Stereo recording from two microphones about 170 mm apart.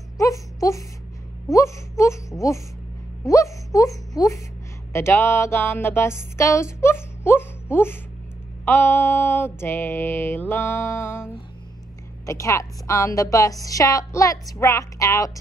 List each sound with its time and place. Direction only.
0.2 s wail: 20° left (ahead or behind)
1.5 s mantra: 15° left (ahead or behind)
3.3 s a woman's voice: 20° left (ahead or behind)
4.9 s mantra: 15° left (ahead or behind)
12.3 s a woman's voice: 15° left (ahead or behind)